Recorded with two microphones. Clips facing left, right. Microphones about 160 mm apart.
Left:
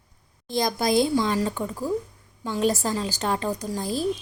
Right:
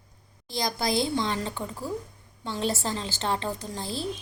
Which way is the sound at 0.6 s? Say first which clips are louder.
Left 5 dB; 20° left (ahead or behind).